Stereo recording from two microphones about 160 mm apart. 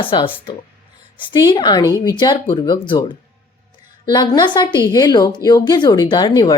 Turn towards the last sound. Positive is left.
turn(degrees=25)  # may be behind; listen again after turning